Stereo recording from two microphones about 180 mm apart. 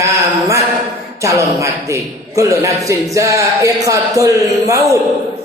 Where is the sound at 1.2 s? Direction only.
15° right (ahead or behind).